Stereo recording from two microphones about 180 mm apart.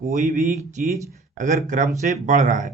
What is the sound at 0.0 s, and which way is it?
A man's voice, 40° right (ahead or behind).